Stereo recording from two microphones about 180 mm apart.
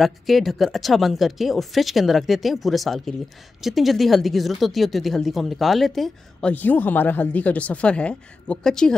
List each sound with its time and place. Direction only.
0.0 s speech: centre (ahead or behind)